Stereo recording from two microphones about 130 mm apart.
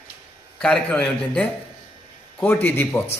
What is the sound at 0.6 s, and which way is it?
Speech, 5° left (ahead or behind).